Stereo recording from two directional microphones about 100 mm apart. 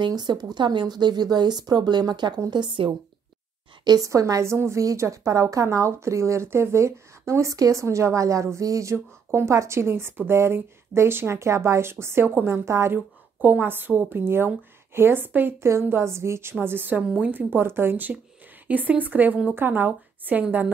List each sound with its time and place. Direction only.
0.0 s a woman's voice: 45° right (ahead or behind)
3.8 s a woman's voice: 35° right (ahead or behind); by 20.6 s 15° right (ahead or behind)